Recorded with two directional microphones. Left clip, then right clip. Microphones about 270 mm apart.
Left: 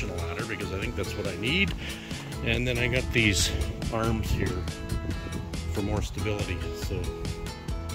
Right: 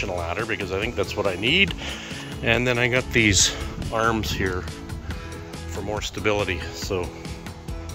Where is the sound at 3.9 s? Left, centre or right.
Right.